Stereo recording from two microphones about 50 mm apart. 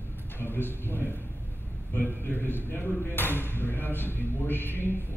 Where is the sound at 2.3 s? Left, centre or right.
Left.